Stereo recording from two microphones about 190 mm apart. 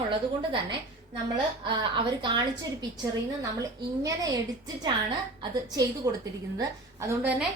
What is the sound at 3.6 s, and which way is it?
A woman's voice, 20° right (ahead or behind).